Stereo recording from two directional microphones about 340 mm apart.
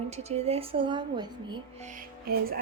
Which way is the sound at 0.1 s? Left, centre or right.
Centre.